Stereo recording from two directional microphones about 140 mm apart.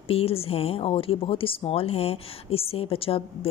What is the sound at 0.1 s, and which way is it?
Speech, 45° left (ahead or behind).